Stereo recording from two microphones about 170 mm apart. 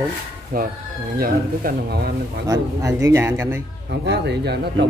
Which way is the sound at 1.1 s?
65° right (ahead or behind).